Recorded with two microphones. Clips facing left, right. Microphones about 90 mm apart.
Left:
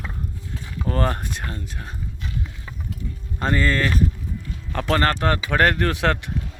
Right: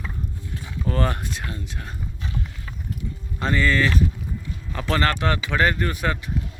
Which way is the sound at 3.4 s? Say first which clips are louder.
Even; 40° left (ahead or behind).